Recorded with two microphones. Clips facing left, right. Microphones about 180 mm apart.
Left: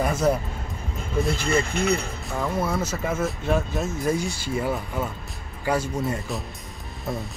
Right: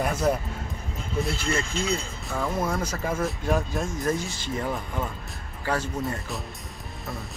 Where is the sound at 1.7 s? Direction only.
65° left (ahead or behind).